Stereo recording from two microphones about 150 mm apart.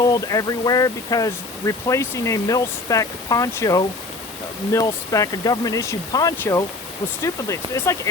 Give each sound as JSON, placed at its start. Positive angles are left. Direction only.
{"t": 0.0, "sound": "speech", "side_deg": 25}